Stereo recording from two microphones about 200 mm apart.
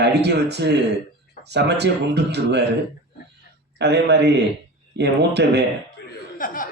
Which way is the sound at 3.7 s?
60° right (ahead or behind).